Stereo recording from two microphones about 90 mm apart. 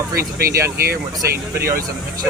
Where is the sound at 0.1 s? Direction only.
30° right (ahead or behind).